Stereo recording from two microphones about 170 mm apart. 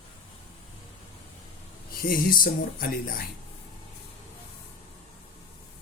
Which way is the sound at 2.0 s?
55° left (ahead or behind).